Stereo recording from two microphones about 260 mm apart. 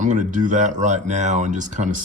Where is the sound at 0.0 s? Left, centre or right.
Right.